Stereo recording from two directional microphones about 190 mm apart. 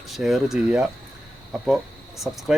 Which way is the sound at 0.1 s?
Centre (ahead or behind).